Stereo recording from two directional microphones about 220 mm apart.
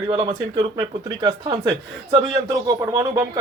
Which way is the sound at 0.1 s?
20° right (ahead or behind).